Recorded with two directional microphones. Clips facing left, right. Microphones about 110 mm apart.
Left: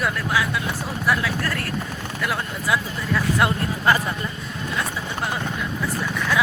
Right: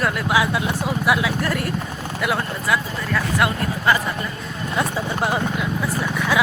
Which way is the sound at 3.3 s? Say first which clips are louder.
Right 1 dB; 30° left (ahead or behind).